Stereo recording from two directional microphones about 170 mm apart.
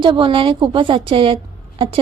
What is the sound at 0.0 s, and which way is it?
A woman's voice, 30° right (ahead or behind).